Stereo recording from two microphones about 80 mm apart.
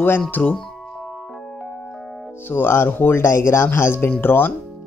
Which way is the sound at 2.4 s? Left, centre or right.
Left.